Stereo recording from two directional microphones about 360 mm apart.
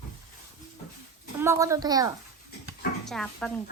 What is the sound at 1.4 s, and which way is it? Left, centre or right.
Speech, centre.